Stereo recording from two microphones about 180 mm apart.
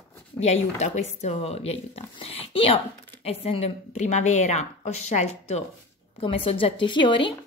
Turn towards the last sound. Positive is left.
turn(degrees=25)  # may be behind; listen again after turning